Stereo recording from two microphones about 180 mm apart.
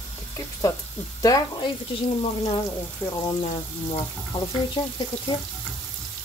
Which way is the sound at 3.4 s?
30° left (ahead or behind).